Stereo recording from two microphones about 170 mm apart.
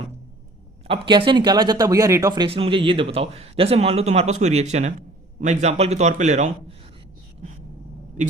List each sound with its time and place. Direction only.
0.9 s speech: 30° right (ahead or behind); by 6.7 s 45° right (ahead or behind)